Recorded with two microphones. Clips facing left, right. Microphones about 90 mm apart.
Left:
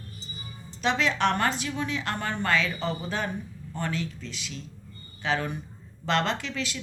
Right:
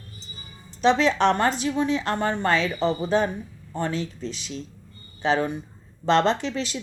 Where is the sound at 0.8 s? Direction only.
30° right (ahead or behind).